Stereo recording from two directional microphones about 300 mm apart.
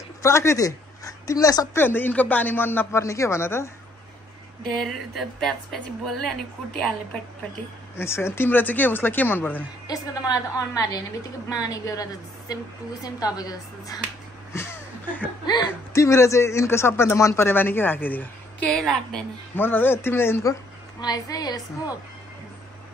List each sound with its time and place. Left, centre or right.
0.2 s speech: centre
4.7 s a woman's voice: centre
7.9 s speech: centre